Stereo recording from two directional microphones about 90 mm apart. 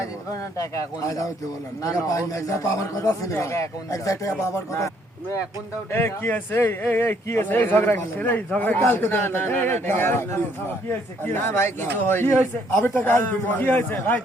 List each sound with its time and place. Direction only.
0.5 s a man's voice: 35° left (ahead or behind)
5.9 s speech: 25° left (ahead or behind)